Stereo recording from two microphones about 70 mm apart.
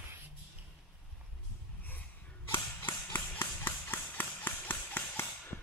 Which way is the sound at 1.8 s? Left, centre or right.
Left.